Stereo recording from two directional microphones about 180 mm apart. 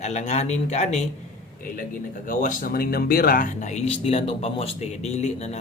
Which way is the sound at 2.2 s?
45° left (ahead or behind).